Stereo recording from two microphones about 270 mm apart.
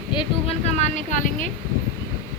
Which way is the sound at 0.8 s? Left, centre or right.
Left.